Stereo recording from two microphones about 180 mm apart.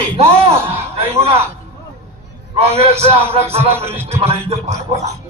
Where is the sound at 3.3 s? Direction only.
35° right (ahead or behind).